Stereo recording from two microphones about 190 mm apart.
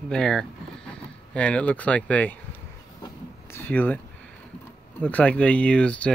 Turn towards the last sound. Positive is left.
turn(degrees=5)  # may be behind; listen again after turning